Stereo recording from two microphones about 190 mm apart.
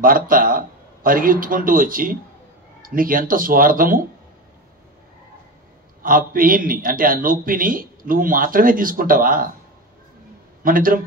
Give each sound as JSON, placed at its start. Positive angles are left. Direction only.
{"t": 0.0, "sound": "a man's voice", "side_deg": -45}
{"t": 6.0, "sound": "a man's voice", "side_deg": -45}
{"t": 10.6, "sound": "a man's voice", "side_deg": -45}